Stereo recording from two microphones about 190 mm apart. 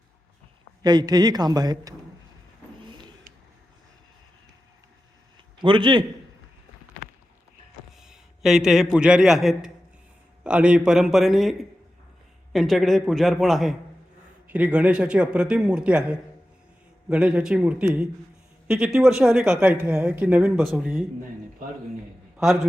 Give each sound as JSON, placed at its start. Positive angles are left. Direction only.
{"t": 0.8, "sound": "a man's voice", "side_deg": -20}
{"t": 5.5, "sound": "a man's voice", "side_deg": -25}
{"t": 7.9, "sound": "a sound", "side_deg": -5}
{"t": 9.0, "sound": "a man's voice", "side_deg": -5}
{"t": 12.5, "sound": "a man's voice", "side_deg": 0}